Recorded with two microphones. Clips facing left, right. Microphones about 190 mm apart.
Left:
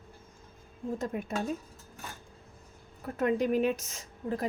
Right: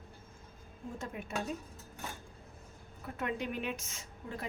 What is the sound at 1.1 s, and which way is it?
Speech, 45° left (ahead or behind).